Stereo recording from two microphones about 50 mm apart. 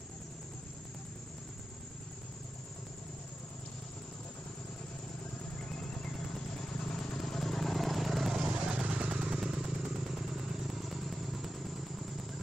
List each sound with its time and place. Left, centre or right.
5.7 s vehicle: centre
8.6 s motorcycle: centre
9.4 s vehicle: centre